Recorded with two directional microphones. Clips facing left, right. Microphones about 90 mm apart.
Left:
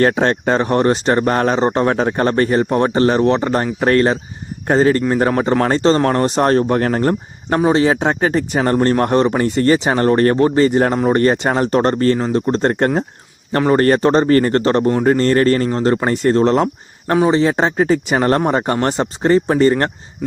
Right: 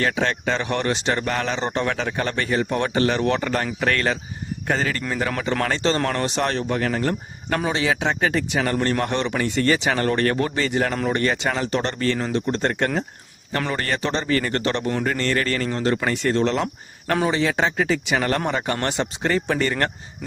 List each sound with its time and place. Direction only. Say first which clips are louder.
0.0 s speech: left 8 dB; 45° left (ahead or behind)